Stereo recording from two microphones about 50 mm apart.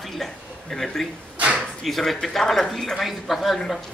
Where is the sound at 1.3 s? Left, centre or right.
Right.